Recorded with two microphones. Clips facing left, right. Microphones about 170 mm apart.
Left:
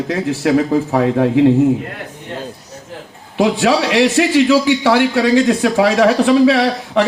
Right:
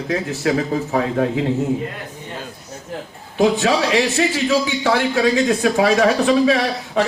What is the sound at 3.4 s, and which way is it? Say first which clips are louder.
A man's voice: left 2 dB; 75° left (ahead or behind).